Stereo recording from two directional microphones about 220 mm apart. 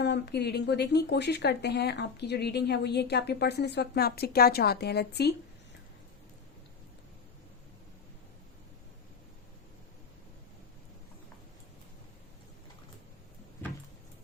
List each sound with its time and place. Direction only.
0.0 s speech: 50° left (ahead or behind)